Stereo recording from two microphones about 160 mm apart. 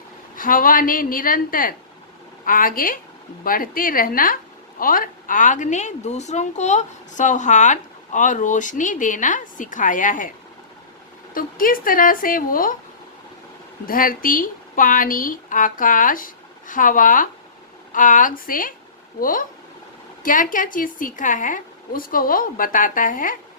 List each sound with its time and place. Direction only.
0.3 s a woman's voice: 60° left (ahead or behind)
11.3 s speech: 60° left (ahead or behind)
13.8 s speech: 60° left (ahead or behind)